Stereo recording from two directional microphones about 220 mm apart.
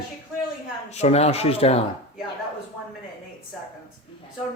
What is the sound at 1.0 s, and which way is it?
Speech, 30° left (ahead or behind).